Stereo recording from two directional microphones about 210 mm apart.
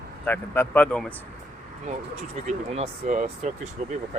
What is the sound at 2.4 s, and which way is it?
Speech, 35° right (ahead or behind).